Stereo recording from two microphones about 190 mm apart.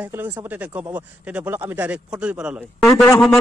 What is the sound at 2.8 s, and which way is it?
Speech, 15° left (ahead or behind).